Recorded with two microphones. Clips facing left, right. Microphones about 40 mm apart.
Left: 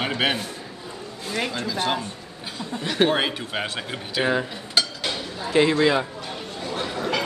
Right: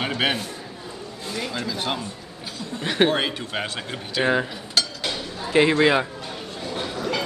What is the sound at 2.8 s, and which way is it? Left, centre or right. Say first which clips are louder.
Speech: right 1 dB; centre.